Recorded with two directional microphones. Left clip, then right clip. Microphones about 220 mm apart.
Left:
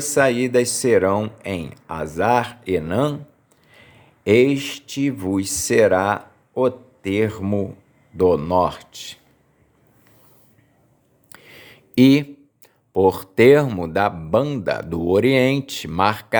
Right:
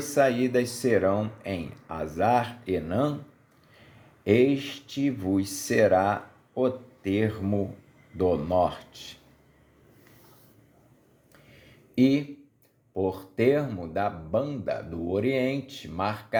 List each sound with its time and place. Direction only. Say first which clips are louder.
0.1 s speech: left 6 dB; 25° left (ahead or behind)
4.2 s speech: left 7 dB; 30° left (ahead or behind)
11.3 s a sound: left 12 dB; 40° left (ahead or behind)
12.9 s speech: left 12 dB; 45° left (ahead or behind)